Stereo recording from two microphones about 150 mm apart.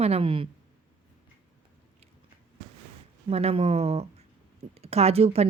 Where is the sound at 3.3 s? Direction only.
45° right (ahead or behind).